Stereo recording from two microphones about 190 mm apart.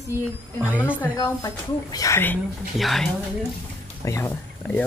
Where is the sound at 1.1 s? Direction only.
20° left (ahead or behind).